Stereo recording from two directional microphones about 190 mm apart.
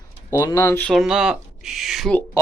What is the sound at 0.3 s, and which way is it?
Speech, 10° left (ahead or behind).